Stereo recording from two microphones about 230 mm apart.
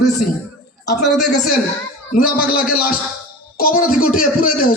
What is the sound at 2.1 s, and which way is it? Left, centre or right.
Speech, left.